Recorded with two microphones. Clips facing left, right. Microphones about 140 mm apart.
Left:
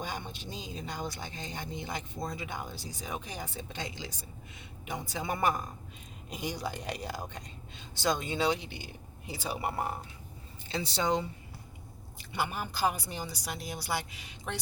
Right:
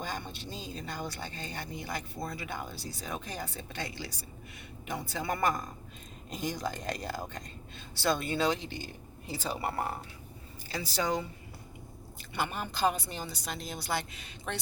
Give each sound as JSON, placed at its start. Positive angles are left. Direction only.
{"t": 0.0, "sound": "speech", "side_deg": 15}
{"t": 10.7, "sound": "speech", "side_deg": 25}
{"t": 12.3, "sound": "speech", "side_deg": 10}